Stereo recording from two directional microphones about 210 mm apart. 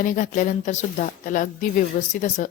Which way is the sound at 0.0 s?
40° left (ahead or behind).